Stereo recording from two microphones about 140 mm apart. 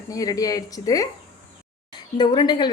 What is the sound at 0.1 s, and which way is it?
Speech, 25° left (ahead or behind).